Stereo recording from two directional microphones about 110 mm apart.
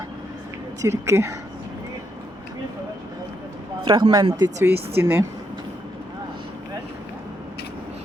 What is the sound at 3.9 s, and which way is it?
Speech, 40° right (ahead or behind).